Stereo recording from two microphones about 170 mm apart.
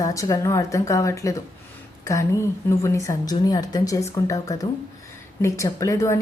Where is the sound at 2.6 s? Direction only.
15° left (ahead or behind).